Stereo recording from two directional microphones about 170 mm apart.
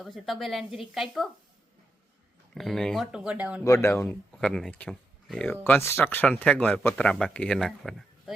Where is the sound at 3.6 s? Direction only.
15° left (ahead or behind).